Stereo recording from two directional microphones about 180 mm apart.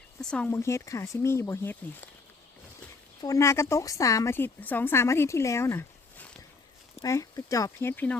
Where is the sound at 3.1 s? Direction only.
20° left (ahead or behind).